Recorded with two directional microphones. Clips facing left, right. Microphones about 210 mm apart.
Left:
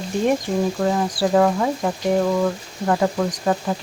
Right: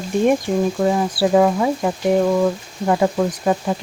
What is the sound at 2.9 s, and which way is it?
Speech, 10° right (ahead or behind).